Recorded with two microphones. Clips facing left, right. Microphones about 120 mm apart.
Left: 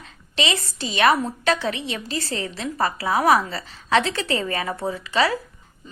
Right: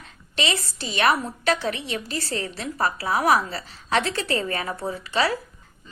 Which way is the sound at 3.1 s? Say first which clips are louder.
Left 3 dB; 35° left (ahead or behind).